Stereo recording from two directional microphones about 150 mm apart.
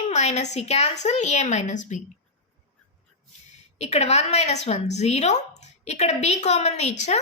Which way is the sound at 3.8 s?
45° left (ahead or behind).